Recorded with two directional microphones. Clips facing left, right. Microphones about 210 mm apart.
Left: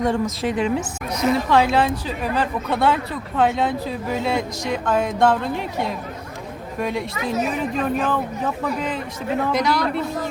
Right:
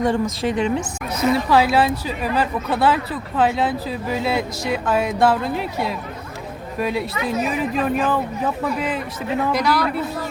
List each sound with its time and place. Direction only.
0.0 s speech: centre (ahead or behind)
9.5 s a man's voice: 20° left (ahead or behind)